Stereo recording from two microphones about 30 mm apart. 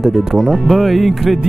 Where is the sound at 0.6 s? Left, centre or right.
Centre.